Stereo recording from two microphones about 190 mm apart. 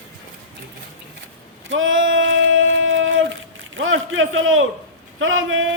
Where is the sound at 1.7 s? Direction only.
90° right.